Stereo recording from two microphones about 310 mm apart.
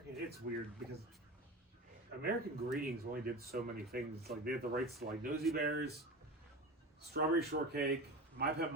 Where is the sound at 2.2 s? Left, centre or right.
Right.